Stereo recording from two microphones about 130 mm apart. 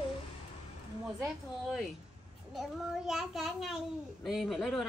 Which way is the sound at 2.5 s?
5° right (ahead or behind).